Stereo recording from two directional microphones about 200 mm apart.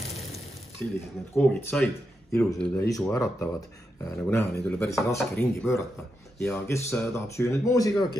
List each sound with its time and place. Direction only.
0.1 s frying: centre (ahead or behind)
0.8 s speech: 5° left (ahead or behind)
3.1 s speech: 15° left (ahead or behind)